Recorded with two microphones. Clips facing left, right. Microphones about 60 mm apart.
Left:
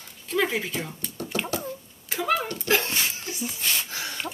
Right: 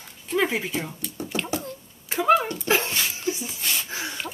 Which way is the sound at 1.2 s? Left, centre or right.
Centre.